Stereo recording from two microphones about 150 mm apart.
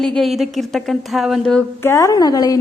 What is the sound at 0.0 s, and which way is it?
A woman's voice, centre (ahead or behind).